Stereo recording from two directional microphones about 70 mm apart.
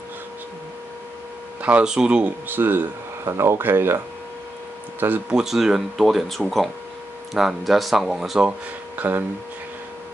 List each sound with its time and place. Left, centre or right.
1.6 s speech: right
5.3 s speech: centre
8.5 s speech: right